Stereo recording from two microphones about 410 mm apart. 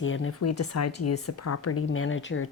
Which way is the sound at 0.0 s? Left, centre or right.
Left.